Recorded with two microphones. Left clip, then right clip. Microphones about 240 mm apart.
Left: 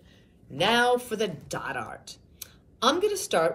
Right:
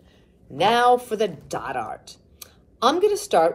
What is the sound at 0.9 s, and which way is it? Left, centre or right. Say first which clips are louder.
Speech: right 5 dB; centre.